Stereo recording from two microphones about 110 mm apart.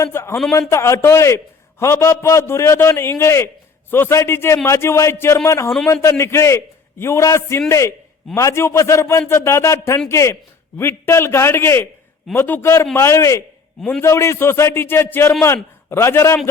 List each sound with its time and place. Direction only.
0.0 s a man's voice: 25° left (ahead or behind)